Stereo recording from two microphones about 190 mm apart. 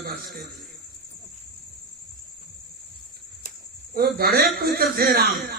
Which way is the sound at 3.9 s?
50° right (ahead or behind).